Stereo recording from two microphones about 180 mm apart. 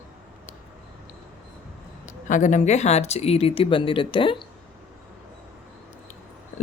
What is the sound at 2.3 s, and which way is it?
Speech, 45° left (ahead or behind).